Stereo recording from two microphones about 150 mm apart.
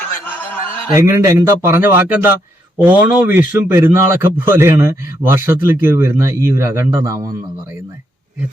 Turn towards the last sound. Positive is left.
turn(degrees=-15)  # may be behind; listen again after turning